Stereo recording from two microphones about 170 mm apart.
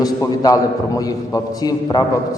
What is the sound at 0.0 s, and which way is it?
A man's voice, 20° left (ahead or behind).